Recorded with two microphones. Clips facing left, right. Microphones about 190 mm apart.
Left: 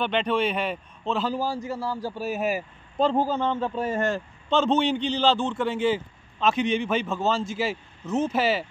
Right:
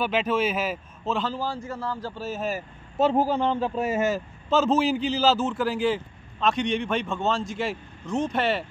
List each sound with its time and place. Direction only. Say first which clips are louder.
0.0 s a man's voice: even; 5° right (ahead or behind)
1.2 s speech: left 2 dB; 10° left (ahead or behind)
3.0 s a man's voice: right 1 dB; 5° right (ahead or behind)